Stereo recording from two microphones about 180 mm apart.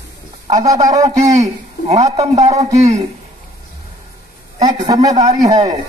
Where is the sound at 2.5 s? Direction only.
20° right (ahead or behind).